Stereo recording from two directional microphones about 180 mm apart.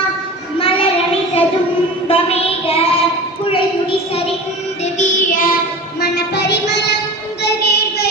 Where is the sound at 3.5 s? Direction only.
30° left (ahead or behind).